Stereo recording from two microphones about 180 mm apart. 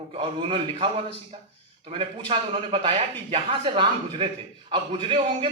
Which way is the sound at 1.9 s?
30° right (ahead or behind).